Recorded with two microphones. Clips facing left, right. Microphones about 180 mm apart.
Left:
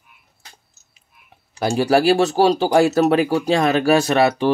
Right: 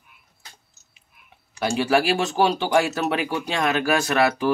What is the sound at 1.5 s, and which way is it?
Speech, 35° left (ahead or behind).